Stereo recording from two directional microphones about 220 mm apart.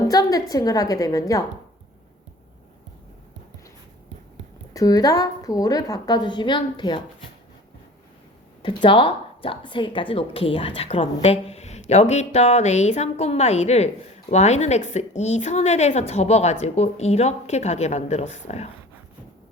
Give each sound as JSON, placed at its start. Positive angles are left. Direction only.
{"t": 0.1, "sound": "a woman's voice", "side_deg": 15}
{"t": 4.7, "sound": "a woman's voice", "side_deg": 15}
{"t": 8.6, "sound": "a woman's voice", "side_deg": 25}